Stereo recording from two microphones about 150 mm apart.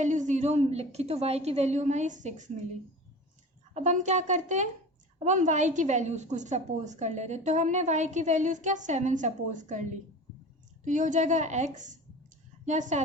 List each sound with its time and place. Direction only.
0.0 s a woman's voice: 55° right (ahead or behind)
3.8 s a woman's voice: 55° right (ahead or behind)
10.8 s a woman's voice: 55° right (ahead or behind)